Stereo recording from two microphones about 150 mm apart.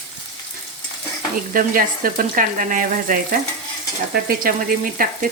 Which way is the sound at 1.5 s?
65° right (ahead or behind).